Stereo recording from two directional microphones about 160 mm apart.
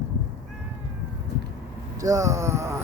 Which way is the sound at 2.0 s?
20° right (ahead or behind).